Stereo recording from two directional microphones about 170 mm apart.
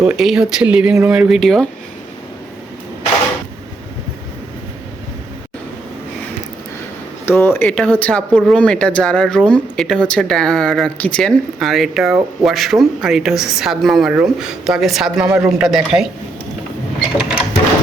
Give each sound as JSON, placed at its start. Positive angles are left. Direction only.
{"t": 0.0, "sound": "speech", "side_deg": -5}
{"t": 7.3, "sound": "speech", "side_deg": 15}
{"t": 17.2, "sound": "printer", "side_deg": -5}